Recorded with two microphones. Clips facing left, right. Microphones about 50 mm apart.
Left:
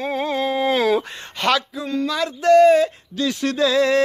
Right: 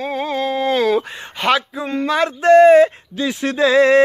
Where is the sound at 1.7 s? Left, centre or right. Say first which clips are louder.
Right 4 dB; right.